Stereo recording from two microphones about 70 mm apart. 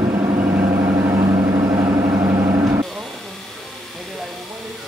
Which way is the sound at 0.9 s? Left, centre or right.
Right.